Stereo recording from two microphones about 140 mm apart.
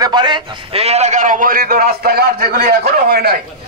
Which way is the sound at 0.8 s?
50° right (ahead or behind).